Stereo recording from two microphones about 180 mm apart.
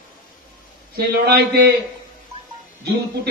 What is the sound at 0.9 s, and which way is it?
Speech, 60° right (ahead or behind).